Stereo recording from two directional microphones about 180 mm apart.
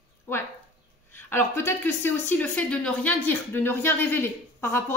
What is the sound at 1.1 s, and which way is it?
A woman's voice, 15° left (ahead or behind).